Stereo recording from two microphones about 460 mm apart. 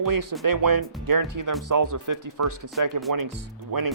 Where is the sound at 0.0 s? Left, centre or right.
Right.